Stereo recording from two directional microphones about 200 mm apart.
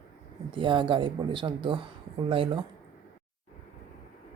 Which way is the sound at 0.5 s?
25° right (ahead or behind).